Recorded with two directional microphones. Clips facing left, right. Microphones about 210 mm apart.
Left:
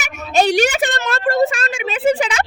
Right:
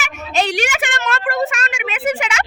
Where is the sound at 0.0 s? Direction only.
40° left (ahead or behind).